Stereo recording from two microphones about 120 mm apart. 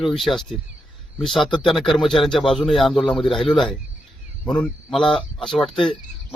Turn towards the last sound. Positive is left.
turn(degrees=5)  # may be behind; listen again after turning